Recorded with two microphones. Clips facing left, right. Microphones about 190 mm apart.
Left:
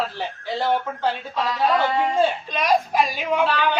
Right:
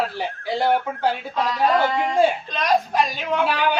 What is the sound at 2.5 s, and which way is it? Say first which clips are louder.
Speech: even; 10° left (ahead or behind).